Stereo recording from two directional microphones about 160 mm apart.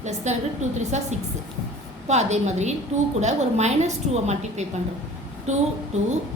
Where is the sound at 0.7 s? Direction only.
45° right (ahead or behind).